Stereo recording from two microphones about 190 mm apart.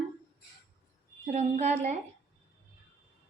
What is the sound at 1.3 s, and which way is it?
Speech, 40° right (ahead or behind).